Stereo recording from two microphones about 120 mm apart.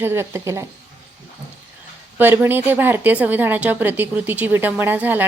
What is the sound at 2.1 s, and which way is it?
A woman's voice, 15° right (ahead or behind).